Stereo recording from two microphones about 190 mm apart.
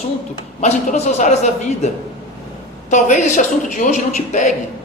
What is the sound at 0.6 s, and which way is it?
Speech, 35° left (ahead or behind).